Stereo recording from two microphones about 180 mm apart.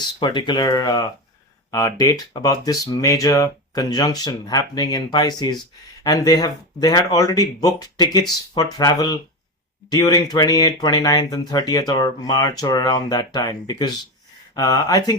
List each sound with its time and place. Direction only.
0.2 s speech: 25° left (ahead or behind)